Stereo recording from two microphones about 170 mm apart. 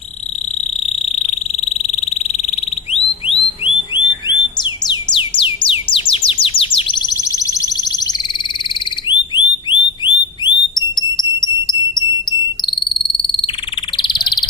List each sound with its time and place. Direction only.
0.9 s frog: 40° left (ahead or behind)
4.3 s music: 25° left (ahead or behind)
8.7 s frog: 25° left (ahead or behind)
10.4 s jingle: 25° left (ahead or behind)
13.9 s frog: 30° left (ahead or behind)